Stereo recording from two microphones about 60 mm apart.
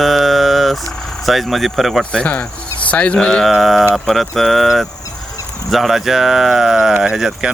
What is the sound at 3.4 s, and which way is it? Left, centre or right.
Speech, centre.